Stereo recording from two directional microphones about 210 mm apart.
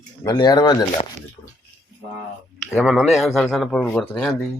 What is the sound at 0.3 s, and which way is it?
Speech, 20° left (ahead or behind).